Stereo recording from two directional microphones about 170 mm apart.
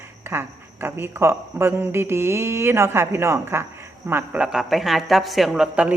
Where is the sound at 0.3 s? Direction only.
15° right (ahead or behind).